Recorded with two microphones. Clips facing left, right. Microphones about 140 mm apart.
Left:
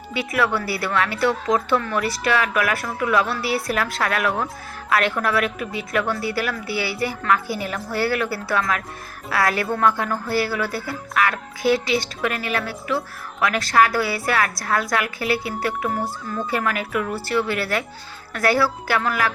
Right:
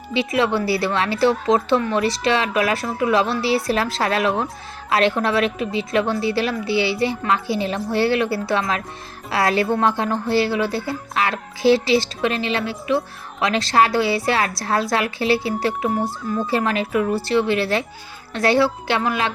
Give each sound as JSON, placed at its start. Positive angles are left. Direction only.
{"t": 0.1, "sound": "speech", "side_deg": -25}